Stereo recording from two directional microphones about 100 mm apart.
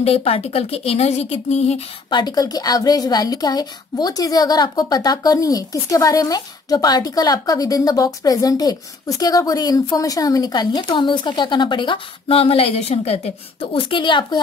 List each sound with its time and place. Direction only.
0.0 s speech: 85° left
2.0 s a woman's voice: 45° left (ahead or behind)